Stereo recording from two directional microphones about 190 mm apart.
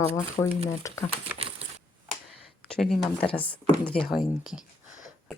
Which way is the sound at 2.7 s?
Centre (ahead or behind).